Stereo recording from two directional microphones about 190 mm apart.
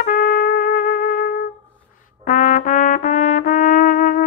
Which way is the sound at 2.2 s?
45° left (ahead or behind).